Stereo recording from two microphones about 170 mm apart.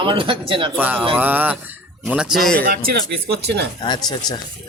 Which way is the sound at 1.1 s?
10° right (ahead or behind).